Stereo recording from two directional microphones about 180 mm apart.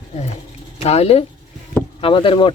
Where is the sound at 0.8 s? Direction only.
35° left (ahead or behind).